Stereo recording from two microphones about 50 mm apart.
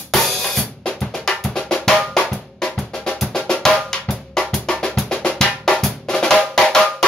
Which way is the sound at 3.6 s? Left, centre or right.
Centre.